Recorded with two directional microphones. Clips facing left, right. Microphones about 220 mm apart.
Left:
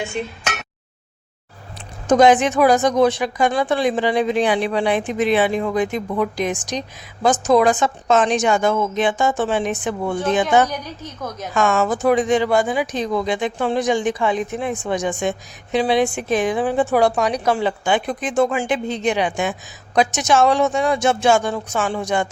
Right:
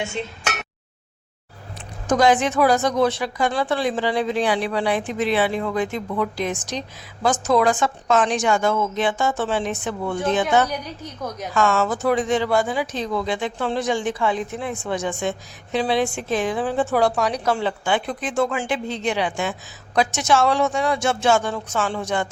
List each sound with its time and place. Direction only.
2.0 s speech: 20° left (ahead or behind)
10.7 s a woman's voice: 10° right (ahead or behind)
11.5 s speech: 15° left (ahead or behind)